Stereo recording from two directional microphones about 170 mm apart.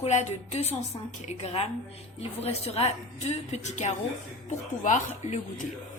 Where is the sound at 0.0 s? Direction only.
45° left (ahead or behind).